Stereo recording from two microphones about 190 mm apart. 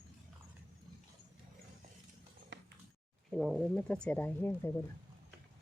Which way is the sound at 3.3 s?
5° left (ahead or behind).